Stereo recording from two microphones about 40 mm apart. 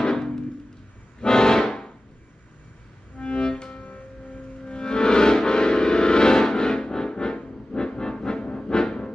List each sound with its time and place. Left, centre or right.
0.0 s music: centre
3.2 s music: left
4.7 s music: left